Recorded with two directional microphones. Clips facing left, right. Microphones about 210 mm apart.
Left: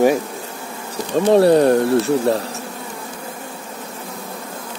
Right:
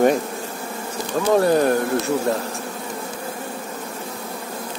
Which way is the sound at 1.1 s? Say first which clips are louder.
Left 5 dB; 30° left (ahead or behind).